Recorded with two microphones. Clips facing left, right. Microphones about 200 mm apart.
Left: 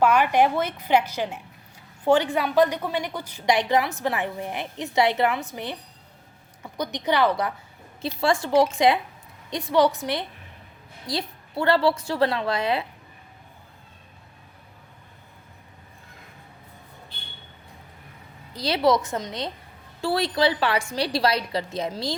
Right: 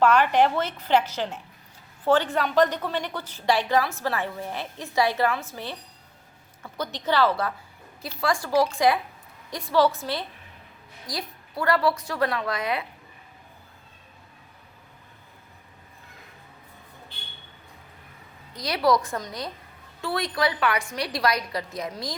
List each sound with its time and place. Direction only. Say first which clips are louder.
0.0 s a woman's voice: even; 10° left (ahead or behind); by 12.8 s 30° left (ahead or behind)
18.5 s a woman's voice: left 2 dB; 30° left (ahead or behind)